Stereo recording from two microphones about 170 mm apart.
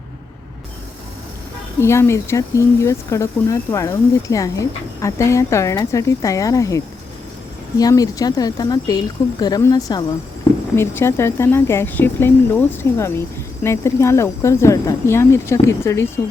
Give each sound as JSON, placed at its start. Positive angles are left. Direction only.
{"t": 1.8, "sound": "speech", "side_deg": 15}